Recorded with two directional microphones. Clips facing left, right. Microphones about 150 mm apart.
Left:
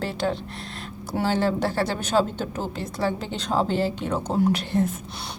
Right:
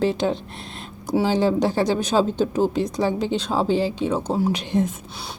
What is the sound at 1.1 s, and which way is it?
A woman's voice, 15° right (ahead or behind).